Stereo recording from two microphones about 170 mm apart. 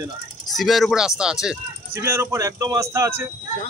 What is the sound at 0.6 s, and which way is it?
Speech, centre (ahead or behind).